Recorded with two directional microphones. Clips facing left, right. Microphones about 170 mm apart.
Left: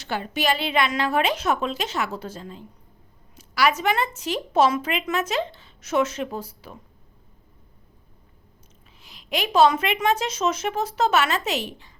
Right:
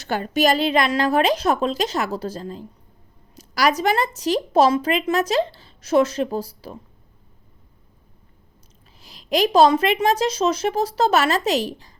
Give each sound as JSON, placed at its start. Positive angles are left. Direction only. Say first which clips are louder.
{"t": 0.0, "sound": "a woman's voice", "louder": "right 6 dB", "side_deg": -45}
{"t": 9.0, "sound": "a woman's voice", "louder": "right 8 dB", "side_deg": -35}